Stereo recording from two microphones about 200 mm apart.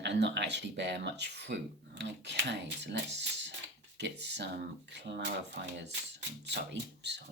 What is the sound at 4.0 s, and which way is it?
Speech, 60° right (ahead or behind).